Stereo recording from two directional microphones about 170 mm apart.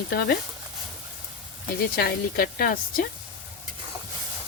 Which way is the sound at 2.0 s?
65° left (ahead or behind).